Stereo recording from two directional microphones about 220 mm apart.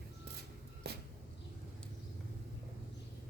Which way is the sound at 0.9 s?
45° right (ahead or behind).